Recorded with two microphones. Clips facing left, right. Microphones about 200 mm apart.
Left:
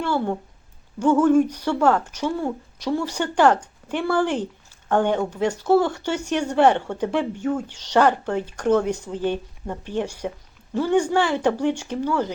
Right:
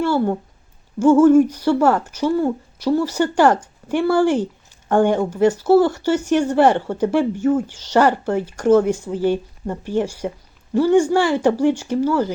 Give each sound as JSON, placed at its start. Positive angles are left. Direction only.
{"t": 0.0, "sound": "speech", "side_deg": -5}
{"t": 7.7, "sound": "speech", "side_deg": 65}
{"t": 7.9, "sound": "speech", "side_deg": -5}